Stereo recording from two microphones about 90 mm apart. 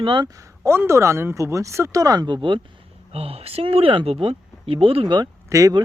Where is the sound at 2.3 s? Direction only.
65° right (ahead or behind).